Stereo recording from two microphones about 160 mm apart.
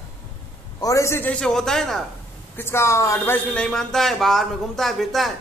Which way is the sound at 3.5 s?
5° left (ahead or behind).